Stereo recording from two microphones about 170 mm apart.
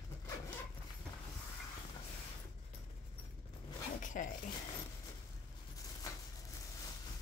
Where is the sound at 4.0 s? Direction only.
50° left (ahead or behind).